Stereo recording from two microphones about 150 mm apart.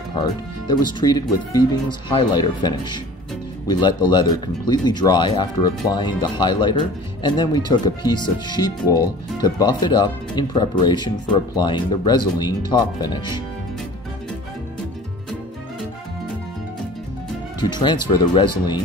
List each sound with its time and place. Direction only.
0.1 s speech: 30° left (ahead or behind)
17.6 s speech: 30° left (ahead or behind)